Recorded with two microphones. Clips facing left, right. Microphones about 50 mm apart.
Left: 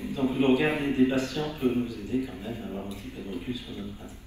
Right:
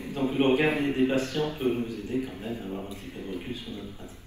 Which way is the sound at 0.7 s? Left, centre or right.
Right.